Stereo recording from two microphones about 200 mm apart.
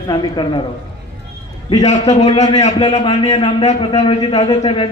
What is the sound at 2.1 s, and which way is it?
A man's voice, 35° left (ahead or behind).